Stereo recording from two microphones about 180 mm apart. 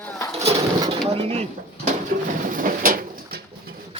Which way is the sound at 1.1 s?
35° right (ahead or behind).